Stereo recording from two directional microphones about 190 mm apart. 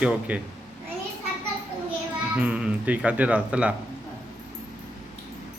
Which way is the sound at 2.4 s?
5° right (ahead or behind).